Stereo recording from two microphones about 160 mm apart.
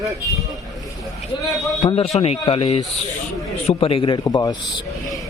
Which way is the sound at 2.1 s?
40° left (ahead or behind).